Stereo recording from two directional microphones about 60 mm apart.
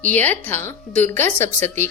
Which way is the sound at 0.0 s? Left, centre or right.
Left.